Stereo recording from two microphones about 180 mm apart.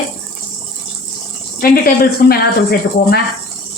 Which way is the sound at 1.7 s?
55° left (ahead or behind).